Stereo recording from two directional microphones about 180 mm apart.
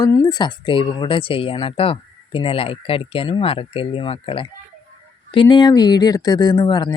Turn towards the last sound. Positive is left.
turn(degrees=25)  # may be behind; listen again after turning